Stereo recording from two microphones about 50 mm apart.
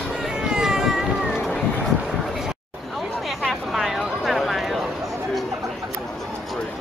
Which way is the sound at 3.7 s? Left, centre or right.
Centre.